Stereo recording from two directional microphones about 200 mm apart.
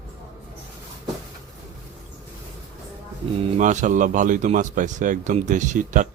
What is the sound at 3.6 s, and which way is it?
Speech, 40° right (ahead or behind).